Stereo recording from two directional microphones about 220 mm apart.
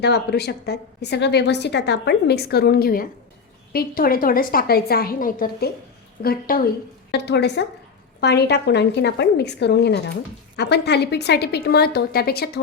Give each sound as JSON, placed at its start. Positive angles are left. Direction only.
{"t": 0.0, "sound": "a woman's voice", "side_deg": 50}